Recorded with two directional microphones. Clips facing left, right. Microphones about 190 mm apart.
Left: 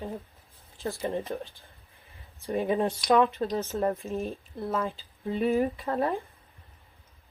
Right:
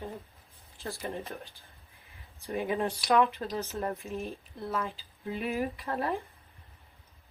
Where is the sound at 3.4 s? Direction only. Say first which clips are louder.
Left 6 dB; 30° left (ahead or behind).